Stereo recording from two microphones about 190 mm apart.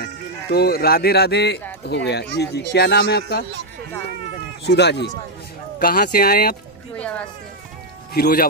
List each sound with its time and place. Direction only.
0.0 s speech: 55° left (ahead or behind)
4.6 s speech: 60° left (ahead or behind)
5.8 s speech: 50° left (ahead or behind)
8.1 s speech: 55° left (ahead or behind)